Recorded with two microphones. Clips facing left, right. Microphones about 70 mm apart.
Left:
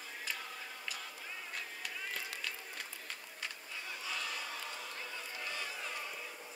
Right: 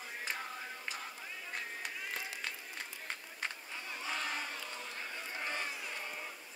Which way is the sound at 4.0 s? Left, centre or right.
Right.